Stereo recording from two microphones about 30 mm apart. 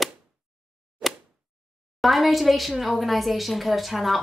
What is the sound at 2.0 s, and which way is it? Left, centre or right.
Speech, centre.